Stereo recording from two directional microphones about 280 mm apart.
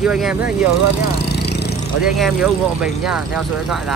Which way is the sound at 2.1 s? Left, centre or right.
Centre.